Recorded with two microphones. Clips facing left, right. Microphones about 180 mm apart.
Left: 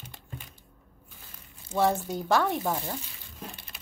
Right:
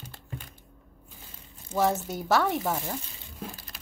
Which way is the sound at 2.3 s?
5° right (ahead or behind).